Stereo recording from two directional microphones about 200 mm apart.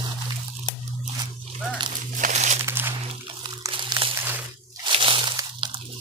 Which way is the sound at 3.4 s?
25° right (ahead or behind).